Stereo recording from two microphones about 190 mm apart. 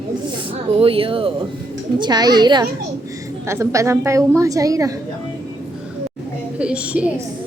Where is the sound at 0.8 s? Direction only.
30° right (ahead or behind).